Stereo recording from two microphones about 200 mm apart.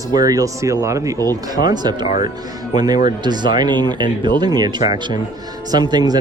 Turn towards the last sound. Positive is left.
turn(degrees=-20)  # may be behind; listen again after turning